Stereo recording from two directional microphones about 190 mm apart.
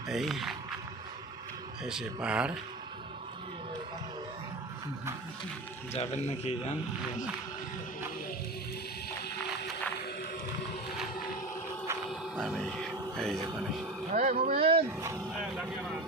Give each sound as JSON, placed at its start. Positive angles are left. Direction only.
{"t": 0.1, "sound": "speech", "side_deg": 0}
{"t": 1.8, "sound": "speech", "side_deg": -5}
{"t": 5.9, "sound": "a man's voice", "side_deg": 35}
{"t": 12.4, "sound": "speech", "side_deg": 0}
{"t": 14.1, "sound": "speech", "side_deg": -40}
{"t": 15.4, "sound": "vehicle", "side_deg": -5}